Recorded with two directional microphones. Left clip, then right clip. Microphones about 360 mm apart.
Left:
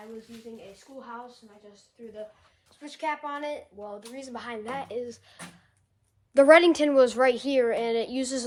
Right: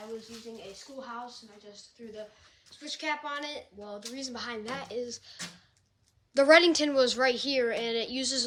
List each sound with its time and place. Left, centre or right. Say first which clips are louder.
1.0 s speech: even; centre
2.6 s speech: left 2 dB; centre